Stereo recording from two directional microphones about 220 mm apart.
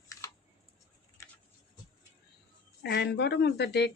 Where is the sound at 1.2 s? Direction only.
15° left (ahead or behind).